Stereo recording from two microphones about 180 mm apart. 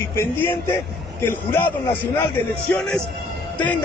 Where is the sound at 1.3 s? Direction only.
10° left (ahead or behind).